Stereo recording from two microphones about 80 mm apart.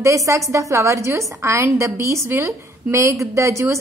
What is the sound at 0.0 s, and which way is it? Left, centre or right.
A woman's voice, right.